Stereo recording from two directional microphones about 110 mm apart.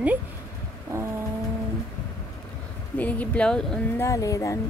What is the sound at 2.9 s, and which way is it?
Speech, 15° left (ahead or behind).